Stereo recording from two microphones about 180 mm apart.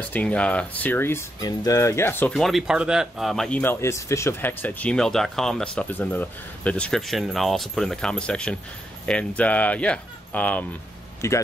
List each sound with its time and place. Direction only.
0.1 s speech: 10° left (ahead or behind)